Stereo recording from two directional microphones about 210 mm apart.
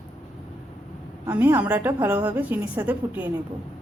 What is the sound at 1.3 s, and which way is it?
A woman's voice, 10° right (ahead or behind).